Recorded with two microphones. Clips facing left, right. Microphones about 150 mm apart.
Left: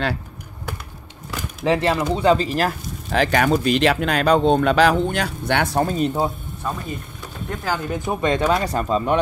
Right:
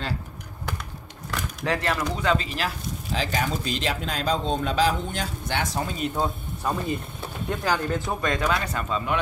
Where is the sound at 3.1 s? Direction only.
65° left (ahead or behind); by 6.1 s 50° left (ahead or behind).